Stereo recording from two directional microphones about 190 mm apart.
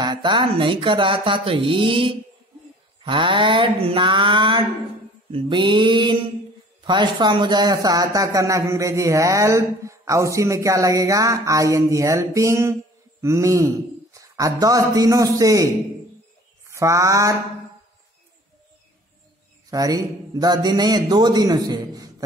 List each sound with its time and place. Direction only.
0.0 s a man's voice: 25° right (ahead or behind)
19.7 s a man's voice: 20° right (ahead or behind)